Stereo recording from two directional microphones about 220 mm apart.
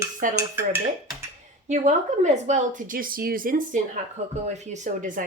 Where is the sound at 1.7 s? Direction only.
30° right (ahead or behind).